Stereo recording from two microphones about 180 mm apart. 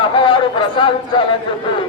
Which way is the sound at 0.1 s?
30° left (ahead or behind).